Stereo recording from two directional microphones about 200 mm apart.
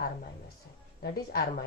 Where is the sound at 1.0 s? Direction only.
50° left (ahead or behind).